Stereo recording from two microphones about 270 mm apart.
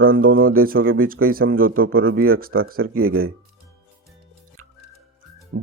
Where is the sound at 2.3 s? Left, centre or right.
Right.